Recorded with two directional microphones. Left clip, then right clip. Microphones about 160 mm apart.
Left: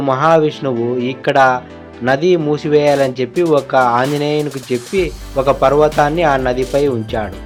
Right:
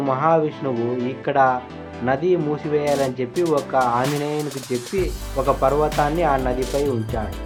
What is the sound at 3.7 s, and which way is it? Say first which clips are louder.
Speech: left 6 dB; 40° left (ahead or behind).